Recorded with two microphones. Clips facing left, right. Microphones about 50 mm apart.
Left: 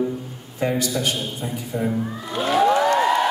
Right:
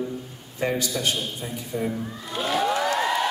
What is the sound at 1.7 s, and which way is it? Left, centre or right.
Speech, centre.